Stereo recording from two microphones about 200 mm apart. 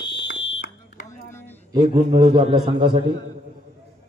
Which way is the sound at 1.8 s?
35° right (ahead or behind).